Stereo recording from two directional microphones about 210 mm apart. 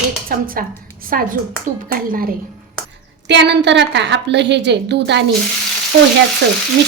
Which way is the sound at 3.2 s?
55° right (ahead or behind).